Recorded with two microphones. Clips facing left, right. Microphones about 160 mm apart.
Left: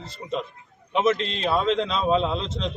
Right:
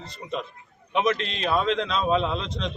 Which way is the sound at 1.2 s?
35° left (ahead or behind).